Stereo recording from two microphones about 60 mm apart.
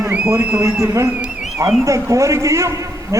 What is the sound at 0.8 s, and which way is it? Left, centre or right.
A man's voice, right.